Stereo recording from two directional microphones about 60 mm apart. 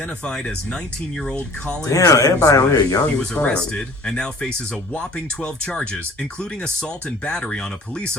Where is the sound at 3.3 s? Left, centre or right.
Left.